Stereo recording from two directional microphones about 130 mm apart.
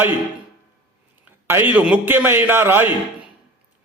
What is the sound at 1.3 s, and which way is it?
A man's voice, 15° right (ahead or behind).